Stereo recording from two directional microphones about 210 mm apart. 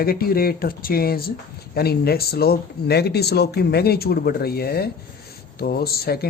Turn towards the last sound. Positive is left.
turn(degrees=45)  # may be behind; listen again after turning